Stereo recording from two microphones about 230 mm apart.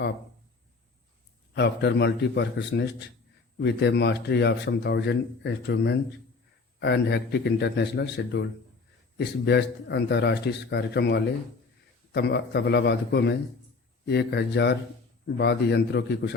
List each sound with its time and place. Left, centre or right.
1.5 s speech: left